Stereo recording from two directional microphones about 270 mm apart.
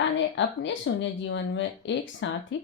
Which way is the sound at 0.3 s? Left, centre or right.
Left.